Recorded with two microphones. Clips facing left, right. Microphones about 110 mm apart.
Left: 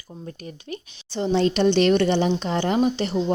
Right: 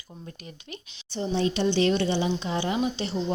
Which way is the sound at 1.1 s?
80° left.